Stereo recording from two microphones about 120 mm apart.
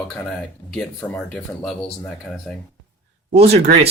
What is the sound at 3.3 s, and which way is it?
Speech, 60° right (ahead or behind).